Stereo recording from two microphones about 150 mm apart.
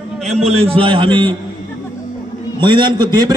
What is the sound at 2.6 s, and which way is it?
Speech, 30° right (ahead or behind).